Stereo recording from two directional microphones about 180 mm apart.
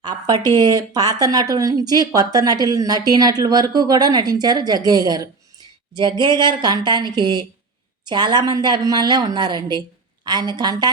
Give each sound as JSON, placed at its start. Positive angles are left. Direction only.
{"t": 0.0, "sound": "speech", "side_deg": -25}